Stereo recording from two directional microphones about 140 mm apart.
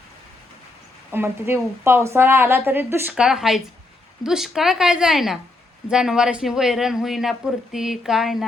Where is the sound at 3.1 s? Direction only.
5° right (ahead or behind).